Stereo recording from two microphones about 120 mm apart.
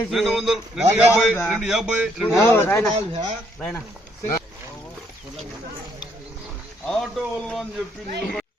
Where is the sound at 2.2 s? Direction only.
15° left (ahead or behind).